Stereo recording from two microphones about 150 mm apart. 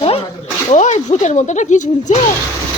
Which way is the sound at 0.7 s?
50° left (ahead or behind).